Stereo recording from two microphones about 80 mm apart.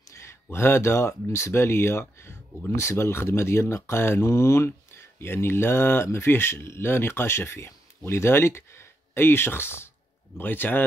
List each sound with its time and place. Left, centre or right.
0.1 s speech: left